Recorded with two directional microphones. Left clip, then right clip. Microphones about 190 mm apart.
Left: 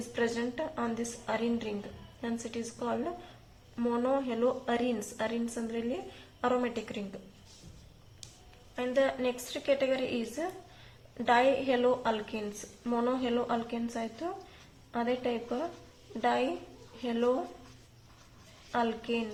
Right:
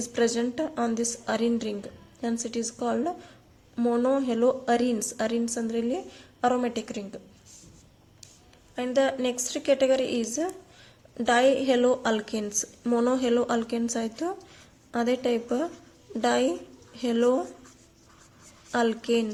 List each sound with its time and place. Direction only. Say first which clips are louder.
0.1 s a woman's voice: right 6 dB; 45° right (ahead or behind)
8.7 s a woman's voice: right 4 dB; 40° right (ahead or behind)
18.7 s a woman's voice: right 7 dB; 50° right (ahead or behind)